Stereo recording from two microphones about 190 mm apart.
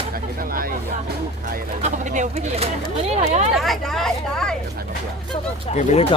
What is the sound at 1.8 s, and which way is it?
Speech, 40° right (ahead or behind).